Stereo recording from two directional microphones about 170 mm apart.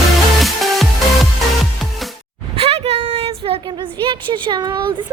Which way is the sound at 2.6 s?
35° right (ahead or behind).